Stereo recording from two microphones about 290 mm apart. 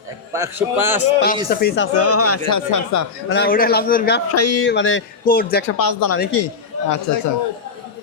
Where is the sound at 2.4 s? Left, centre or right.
Left.